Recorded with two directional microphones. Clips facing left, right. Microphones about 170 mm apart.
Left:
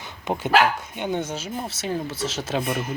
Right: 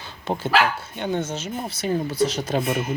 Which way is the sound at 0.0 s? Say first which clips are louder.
Even; 15° left (ahead or behind).